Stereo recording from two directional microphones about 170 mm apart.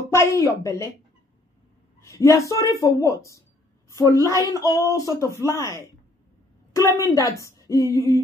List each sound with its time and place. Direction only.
0.1 s a woman's voice: 15° left (ahead or behind)
2.0 s a woman's voice: 15° left (ahead or behind)